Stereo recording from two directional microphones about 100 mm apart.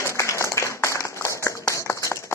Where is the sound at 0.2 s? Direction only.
30° left (ahead or behind).